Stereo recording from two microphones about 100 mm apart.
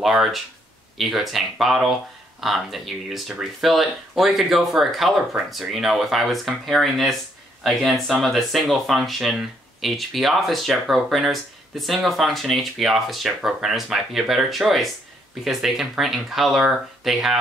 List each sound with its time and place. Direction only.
0.0 s speech: 5° right (ahead or behind)